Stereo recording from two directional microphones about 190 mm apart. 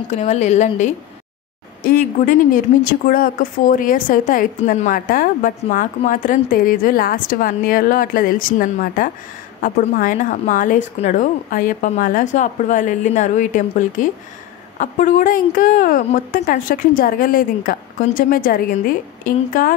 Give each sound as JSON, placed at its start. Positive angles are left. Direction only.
{"t": 0.1, "sound": "a woman's voice", "side_deg": 35}
{"t": 1.8, "sound": "a woman's voice", "side_deg": 50}